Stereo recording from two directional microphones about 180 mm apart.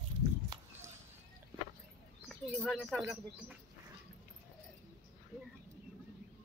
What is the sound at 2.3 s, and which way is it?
Speech, centre (ahead or behind).